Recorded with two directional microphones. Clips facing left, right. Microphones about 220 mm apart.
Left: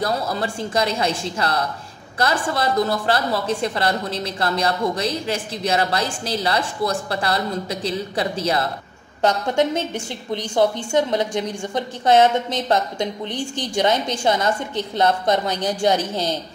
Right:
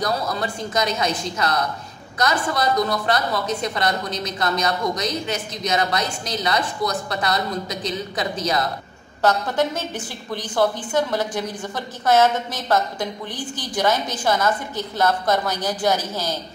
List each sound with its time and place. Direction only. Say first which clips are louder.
0.0 s a woman's voice: left 1 dB; 30° left (ahead or behind)